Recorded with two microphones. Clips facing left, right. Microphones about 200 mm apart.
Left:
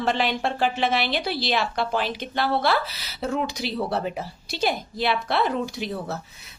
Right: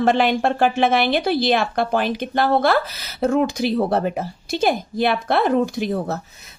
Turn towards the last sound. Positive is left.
turn(degrees=-45)  # may be behind; listen again after turning